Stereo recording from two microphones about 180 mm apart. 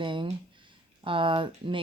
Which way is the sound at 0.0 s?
25° right (ahead or behind).